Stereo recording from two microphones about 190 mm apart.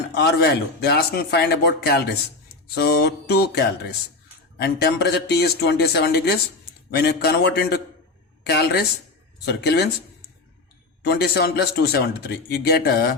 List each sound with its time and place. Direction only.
0.1 s a man's voice: 60° left (ahead or behind)
11.0 s a man's voice: 60° left (ahead or behind)